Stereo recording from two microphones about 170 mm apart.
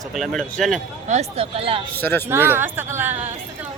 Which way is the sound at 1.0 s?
40° right (ahead or behind).